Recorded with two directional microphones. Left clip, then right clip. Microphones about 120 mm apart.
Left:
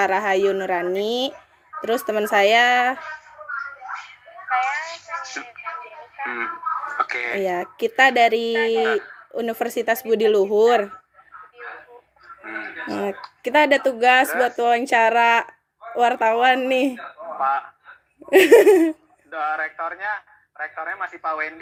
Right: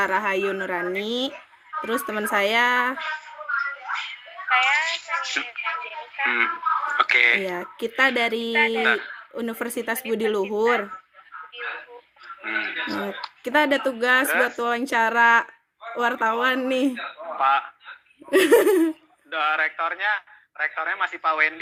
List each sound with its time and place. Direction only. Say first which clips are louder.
0.0 s speech: left 4 dB; 25° right (ahead or behind)
3.0 s music: right 4 dB; 50° right (ahead or behind)
6.8 s a sound: right 10 dB; 40° right (ahead or behind)
7.5 s speech: left 5 dB; 25° right (ahead or behind)
9.0 s a sound: left 4 dB; 45° right (ahead or behind)
9.3 s speech: left 6 dB; 30° right (ahead or behind)
11.5 s a sound: right 5 dB; 45° right (ahead or behind)
12.4 s music: right 5 dB; 40° right (ahead or behind)
13.4 s speech: left 4 dB; 25° right (ahead or behind)
17.3 s honk: right 1 dB; 45° right (ahead or behind)
18.3 s speech: left 5 dB; 25° right (ahead or behind)
19.3 s a man's voice: right 2 dB; 50° right (ahead or behind)